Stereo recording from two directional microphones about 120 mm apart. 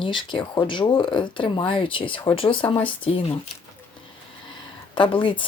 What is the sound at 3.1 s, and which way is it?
Speech, 60° left (ahead or behind).